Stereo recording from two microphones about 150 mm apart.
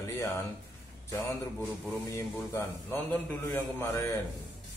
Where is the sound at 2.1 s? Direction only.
15° left (ahead or behind).